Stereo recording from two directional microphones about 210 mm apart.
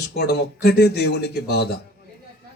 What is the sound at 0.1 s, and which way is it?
A man's voice, 50° left (ahead or behind).